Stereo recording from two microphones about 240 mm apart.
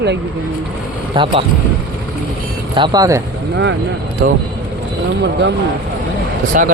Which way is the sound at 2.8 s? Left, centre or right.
Centre.